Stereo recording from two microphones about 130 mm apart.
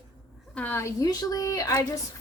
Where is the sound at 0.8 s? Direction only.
25° left (ahead or behind).